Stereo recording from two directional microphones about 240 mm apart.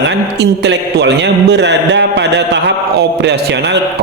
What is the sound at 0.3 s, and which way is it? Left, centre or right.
A man's voice, right.